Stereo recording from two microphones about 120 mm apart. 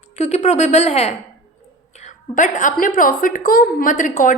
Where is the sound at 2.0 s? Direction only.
90° left.